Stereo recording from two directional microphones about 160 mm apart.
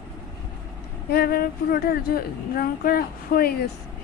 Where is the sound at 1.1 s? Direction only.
75° left (ahead or behind).